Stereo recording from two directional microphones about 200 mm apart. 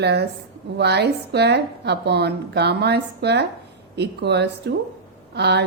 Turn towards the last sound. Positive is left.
turn(degrees=-55)  # may be behind; listen again after turning